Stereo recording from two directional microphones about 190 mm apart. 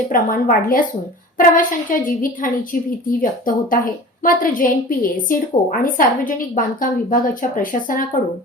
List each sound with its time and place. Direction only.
0.1 s a woman's voice: 45° left (ahead or behind)